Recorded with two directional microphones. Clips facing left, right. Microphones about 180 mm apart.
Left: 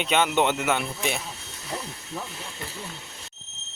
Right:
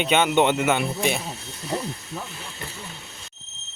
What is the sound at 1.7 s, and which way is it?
Speech, 30° right (ahead or behind).